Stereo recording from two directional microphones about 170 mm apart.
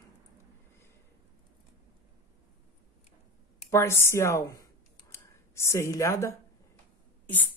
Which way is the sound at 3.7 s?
15° left (ahead or behind).